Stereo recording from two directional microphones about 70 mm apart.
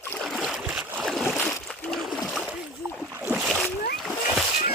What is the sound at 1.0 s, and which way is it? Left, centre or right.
Boat, centre.